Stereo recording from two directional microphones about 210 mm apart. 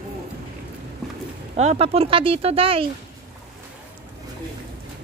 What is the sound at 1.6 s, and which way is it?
A woman's voice, 30° right (ahead or behind).